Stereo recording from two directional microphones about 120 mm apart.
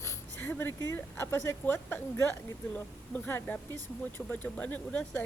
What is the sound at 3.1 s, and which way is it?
Speech, 15° left (ahead or behind).